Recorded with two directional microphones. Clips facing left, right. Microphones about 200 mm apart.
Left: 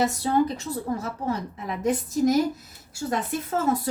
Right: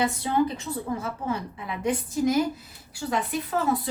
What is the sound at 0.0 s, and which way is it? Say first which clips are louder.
A woman's voice: left 2 dB; 40° left (ahead or behind).